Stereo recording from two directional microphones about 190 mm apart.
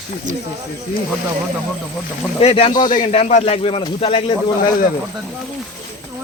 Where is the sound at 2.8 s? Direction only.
45° left (ahead or behind).